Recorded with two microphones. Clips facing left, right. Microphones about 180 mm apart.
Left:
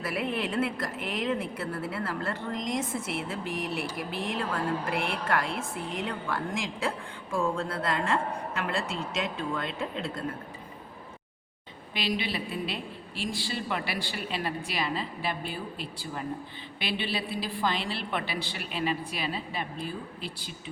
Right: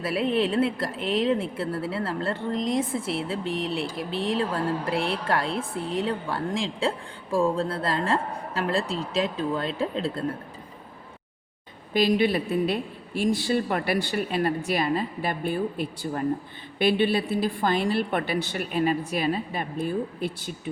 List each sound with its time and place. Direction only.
0.0 s a woman's voice: 30° right (ahead or behind)
11.9 s a woman's voice: 50° right (ahead or behind)